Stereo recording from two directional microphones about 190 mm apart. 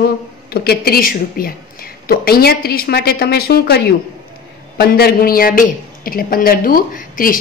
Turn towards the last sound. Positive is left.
turn(degrees=45)  # may be behind; listen again after turning